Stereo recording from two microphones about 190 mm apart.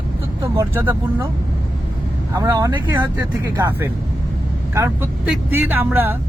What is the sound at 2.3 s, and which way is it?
A man's voice, 15° right (ahead or behind).